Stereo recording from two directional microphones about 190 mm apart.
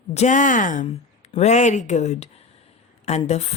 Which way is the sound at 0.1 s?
40° left (ahead or behind).